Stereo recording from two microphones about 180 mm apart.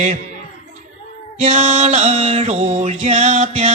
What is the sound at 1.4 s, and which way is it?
Mantra, 40° right (ahead or behind).